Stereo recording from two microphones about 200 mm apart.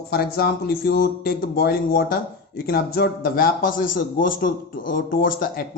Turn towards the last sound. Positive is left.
turn(degrees=45)  # may be behind; listen again after turning